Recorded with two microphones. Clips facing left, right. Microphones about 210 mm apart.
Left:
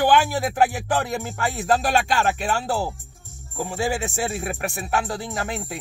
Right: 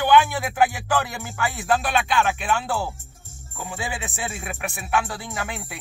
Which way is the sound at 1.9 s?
40° left (ahead or behind).